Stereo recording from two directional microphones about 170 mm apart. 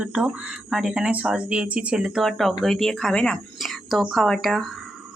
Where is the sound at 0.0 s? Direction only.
5° right (ahead or behind).